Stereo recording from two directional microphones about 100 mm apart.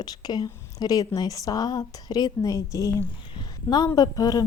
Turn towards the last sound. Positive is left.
turn(degrees=40)  # may be behind; listen again after turning